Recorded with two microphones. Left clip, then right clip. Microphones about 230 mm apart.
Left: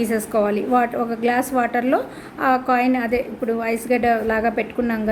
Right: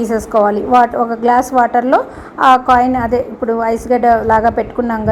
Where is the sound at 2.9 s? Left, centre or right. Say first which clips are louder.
Right 6 dB; centre.